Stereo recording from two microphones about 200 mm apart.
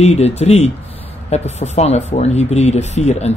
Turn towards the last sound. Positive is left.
turn(degrees=35)  # may be behind; listen again after turning